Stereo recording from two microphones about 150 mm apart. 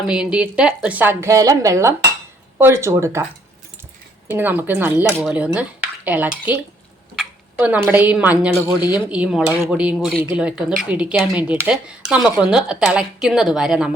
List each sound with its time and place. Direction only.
0.1 s a woman's voice: 5° right (ahead or behind)
4.3 s a woman's voice: 10° right (ahead or behind)
7.2 s tick-tock: 10° right (ahead or behind)
7.9 s a woman's voice: 10° right (ahead or behind)